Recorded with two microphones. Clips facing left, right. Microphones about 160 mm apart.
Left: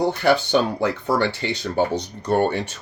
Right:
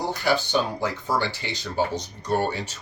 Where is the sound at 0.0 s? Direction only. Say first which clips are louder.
Left 6 dB; 60° left (ahead or behind).